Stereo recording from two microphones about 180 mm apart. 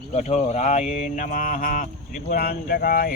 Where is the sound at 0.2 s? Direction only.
35° left (ahead or behind); by 1.9 s 50° left (ahead or behind).